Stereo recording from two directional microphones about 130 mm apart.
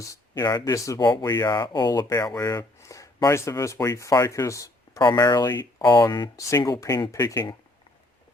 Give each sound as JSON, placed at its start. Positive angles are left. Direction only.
{"t": 0.0, "sound": "speech", "side_deg": 25}